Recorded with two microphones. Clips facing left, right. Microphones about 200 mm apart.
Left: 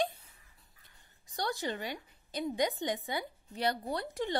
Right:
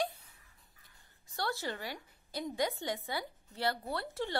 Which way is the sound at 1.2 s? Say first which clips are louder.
Left 2 dB; 15° left (ahead or behind).